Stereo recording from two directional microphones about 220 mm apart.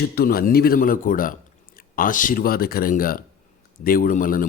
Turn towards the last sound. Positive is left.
turn(degrees=40)  # may be behind; listen again after turning